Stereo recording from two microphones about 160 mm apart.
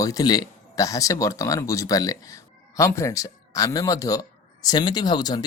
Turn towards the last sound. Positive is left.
turn(degrees=25)  # may be behind; listen again after turning